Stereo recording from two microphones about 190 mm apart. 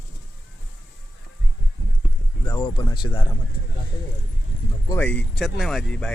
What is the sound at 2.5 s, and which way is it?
Speech, 25° left (ahead or behind).